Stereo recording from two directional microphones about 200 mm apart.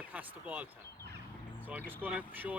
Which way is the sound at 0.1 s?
5° right (ahead or behind).